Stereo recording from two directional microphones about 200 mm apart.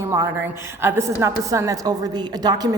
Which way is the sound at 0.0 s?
15° right (ahead or behind).